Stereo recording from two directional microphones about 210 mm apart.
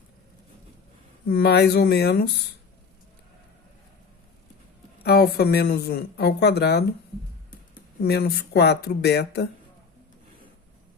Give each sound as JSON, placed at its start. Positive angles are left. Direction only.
{"t": 1.3, "sound": "speech", "side_deg": 50}
{"t": 5.0, "sound": "speech", "side_deg": 50}
{"t": 8.0, "sound": "speech", "side_deg": 50}